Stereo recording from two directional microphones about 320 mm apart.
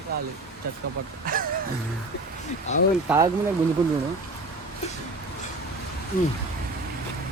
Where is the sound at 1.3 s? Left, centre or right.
Right.